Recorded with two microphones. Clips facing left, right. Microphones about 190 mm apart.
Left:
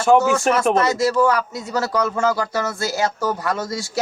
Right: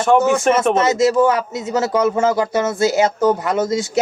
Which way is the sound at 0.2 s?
20° right (ahead or behind).